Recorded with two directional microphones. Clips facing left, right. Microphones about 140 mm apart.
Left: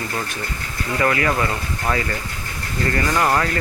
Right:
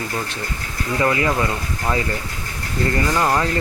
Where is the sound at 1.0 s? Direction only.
20° right (ahead or behind).